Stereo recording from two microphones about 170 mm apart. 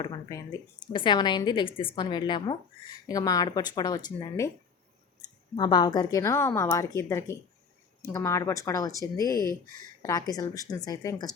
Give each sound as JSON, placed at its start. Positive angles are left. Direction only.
{"t": 0.0, "sound": "a sound", "side_deg": 25}
{"t": 0.9, "sound": "a woman's voice", "side_deg": 25}
{"t": 5.5, "sound": "a woman's voice", "side_deg": 25}